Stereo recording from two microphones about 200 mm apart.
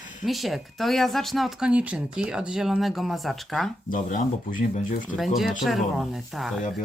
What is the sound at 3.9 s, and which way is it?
Speech, 40° left (ahead or behind).